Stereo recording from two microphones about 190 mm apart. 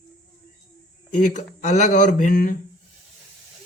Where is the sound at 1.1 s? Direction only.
40° left (ahead or behind).